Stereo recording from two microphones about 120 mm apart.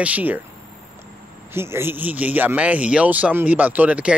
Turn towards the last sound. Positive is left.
turn(degrees=-10)  # may be behind; listen again after turning